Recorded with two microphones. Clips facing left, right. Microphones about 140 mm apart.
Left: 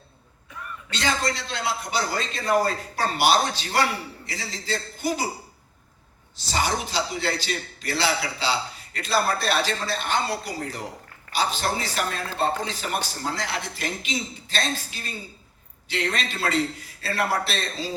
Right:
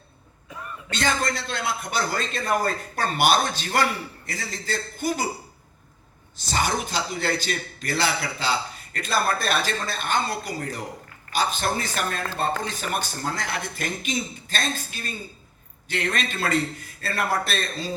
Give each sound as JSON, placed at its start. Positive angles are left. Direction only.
{"t": 0.9, "sound": "a man's voice", "side_deg": -50}
{"t": 6.3, "sound": "a man's voice", "side_deg": -50}
{"t": 11.3, "sound": "a man's voice", "side_deg": -50}